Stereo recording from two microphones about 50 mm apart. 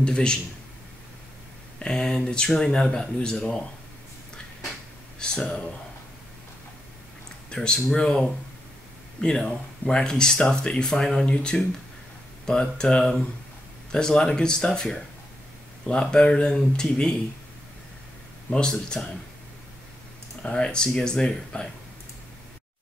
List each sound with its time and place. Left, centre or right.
0.0 s speech: centre
1.8 s speech: centre
5.2 s speech: centre
7.4 s speech: centre
18.5 s speech: centre
20.4 s speech: centre